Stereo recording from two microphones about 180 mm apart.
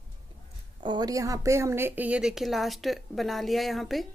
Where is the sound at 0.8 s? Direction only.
25° right (ahead or behind); by 4.0 s centre (ahead or behind).